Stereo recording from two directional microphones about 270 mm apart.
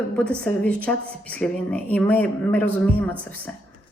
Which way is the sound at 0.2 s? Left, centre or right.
Centre.